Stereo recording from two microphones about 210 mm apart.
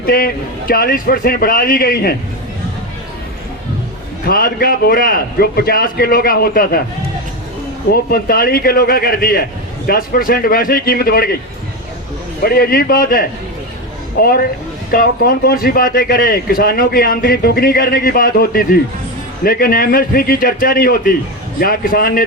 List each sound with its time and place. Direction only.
0.0 s a man's voice: 45° left (ahead or behind)
4.3 s speech: 45° left (ahead or behind)
7.9 s speech: 45° left (ahead or behind)
12.4 s speech: 45° left (ahead or behind)